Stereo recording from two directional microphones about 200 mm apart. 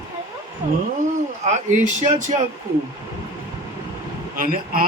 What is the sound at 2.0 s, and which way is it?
Speech, 40° right (ahead or behind).